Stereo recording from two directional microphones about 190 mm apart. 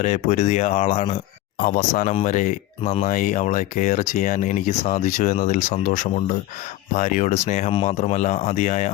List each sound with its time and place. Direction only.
0.0 s speech: 35° left (ahead or behind)